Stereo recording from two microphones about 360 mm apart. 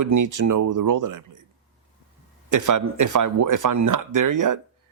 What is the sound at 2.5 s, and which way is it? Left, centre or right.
Speech, right.